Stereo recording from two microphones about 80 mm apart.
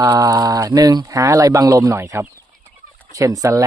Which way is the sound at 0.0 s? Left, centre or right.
Right.